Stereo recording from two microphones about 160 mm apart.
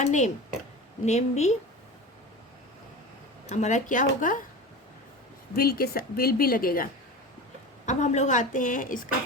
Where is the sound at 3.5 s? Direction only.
50° left (ahead or behind).